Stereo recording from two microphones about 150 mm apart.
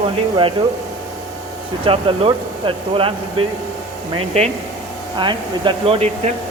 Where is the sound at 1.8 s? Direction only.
35° right (ahead or behind).